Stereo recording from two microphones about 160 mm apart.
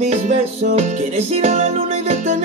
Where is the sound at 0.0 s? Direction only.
45° right (ahead or behind).